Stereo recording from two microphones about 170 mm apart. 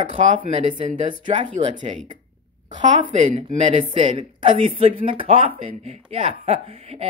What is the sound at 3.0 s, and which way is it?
Speech, 45° right (ahead or behind).